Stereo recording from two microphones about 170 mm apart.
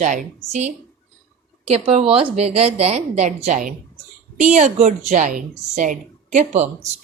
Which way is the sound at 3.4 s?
50° right (ahead or behind).